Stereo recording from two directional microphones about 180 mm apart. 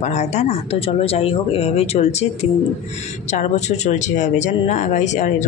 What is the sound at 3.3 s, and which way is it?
Speech, 40° left (ahead or behind).